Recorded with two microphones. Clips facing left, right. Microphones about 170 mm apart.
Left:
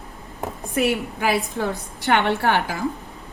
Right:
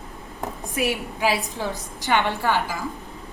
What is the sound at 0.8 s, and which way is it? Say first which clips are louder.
A woman's voice: left 3 dB; 55° left (ahead or behind).